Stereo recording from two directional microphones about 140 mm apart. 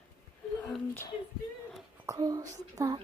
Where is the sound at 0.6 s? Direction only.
5° left (ahead or behind).